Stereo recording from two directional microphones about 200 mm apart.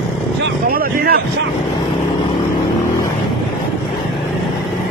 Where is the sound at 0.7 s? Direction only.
45° right (ahead or behind).